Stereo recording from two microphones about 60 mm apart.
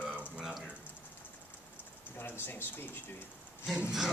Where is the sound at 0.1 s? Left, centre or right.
Right.